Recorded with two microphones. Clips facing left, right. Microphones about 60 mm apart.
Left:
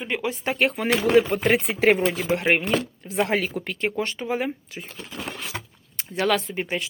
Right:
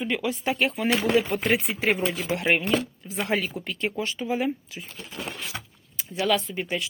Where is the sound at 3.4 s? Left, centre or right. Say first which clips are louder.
Left 3 dB; left.